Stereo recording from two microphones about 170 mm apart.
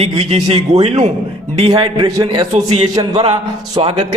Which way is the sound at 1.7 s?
25° right (ahead or behind).